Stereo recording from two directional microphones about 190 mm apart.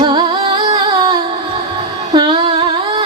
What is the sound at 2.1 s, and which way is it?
Humming, 25° right (ahead or behind).